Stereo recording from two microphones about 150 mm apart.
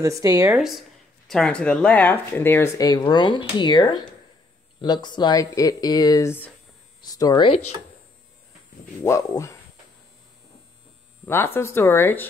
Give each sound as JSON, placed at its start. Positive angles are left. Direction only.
{"t": 0.0, "sound": "speech", "side_deg": -20}
{"t": 0.5, "sound": "speech", "side_deg": 0}
{"t": 9.0, "sound": "speech", "side_deg": 20}
{"t": 11.2, "sound": "speech", "side_deg": 15}